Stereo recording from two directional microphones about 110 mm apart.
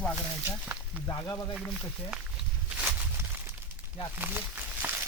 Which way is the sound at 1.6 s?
5° right (ahead or behind).